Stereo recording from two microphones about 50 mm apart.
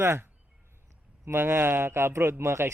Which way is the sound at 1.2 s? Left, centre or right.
Right.